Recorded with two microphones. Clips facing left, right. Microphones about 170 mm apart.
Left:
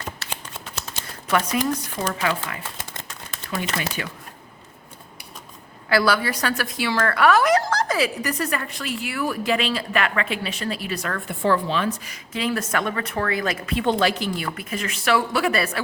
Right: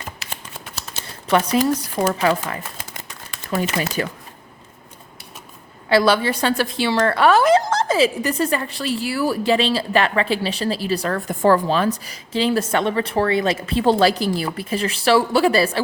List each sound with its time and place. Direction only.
1.3 s a woman's voice: 30° right (ahead or behind)
3.5 s a woman's voice: 40° right (ahead or behind)
5.9 s a woman's voice: 25° right (ahead or behind)